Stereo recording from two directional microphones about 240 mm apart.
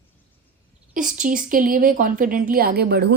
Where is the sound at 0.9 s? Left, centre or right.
Right.